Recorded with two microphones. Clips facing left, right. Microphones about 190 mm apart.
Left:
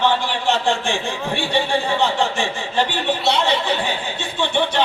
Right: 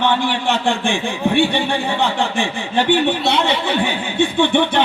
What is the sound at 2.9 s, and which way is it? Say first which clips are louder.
Speech: right 5 dB; 55° right (ahead or behind).